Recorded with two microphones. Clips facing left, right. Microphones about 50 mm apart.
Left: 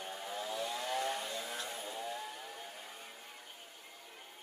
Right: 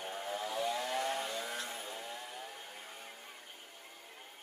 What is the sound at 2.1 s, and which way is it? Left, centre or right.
Chainsaw, left.